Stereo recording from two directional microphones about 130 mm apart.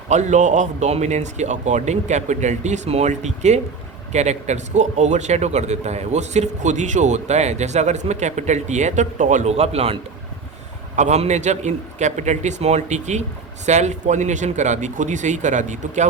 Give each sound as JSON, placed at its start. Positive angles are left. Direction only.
{"t": 0.1, "sound": "a man's voice", "side_deg": -65}
{"t": 10.9, "sound": "a man's voice", "side_deg": -65}